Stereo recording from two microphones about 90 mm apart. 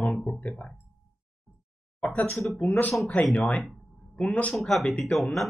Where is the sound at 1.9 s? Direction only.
15° left (ahead or behind).